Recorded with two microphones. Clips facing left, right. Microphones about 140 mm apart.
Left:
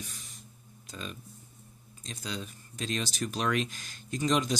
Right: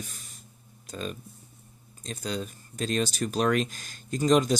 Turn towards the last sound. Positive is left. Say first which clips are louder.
# right 6 dB
turn(degrees=-45)  # may be behind; listen again after turning